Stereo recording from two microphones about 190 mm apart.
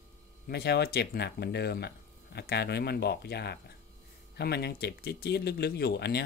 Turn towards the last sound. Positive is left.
turn(degrees=60)  # may be behind; listen again after turning